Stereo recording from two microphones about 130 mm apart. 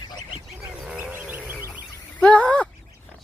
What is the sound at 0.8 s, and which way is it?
Bird, 10° right (ahead or behind).